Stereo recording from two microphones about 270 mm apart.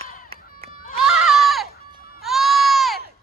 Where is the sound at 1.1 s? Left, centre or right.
Centre.